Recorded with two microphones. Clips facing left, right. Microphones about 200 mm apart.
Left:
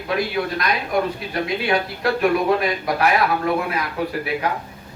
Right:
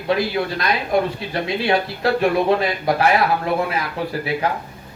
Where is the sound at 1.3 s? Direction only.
25° right (ahead or behind).